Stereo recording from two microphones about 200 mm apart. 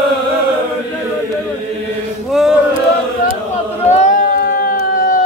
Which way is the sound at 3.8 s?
35° left (ahead or behind).